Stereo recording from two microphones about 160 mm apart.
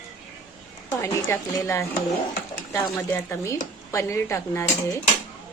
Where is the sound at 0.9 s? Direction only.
20° left (ahead or behind).